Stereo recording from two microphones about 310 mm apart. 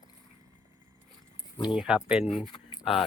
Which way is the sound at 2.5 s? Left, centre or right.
Centre.